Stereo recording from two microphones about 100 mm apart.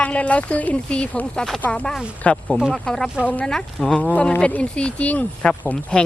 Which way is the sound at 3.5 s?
5° left (ahead or behind).